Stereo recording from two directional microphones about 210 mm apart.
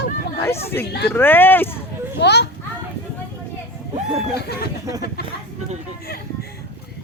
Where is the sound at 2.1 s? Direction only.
55° left (ahead or behind).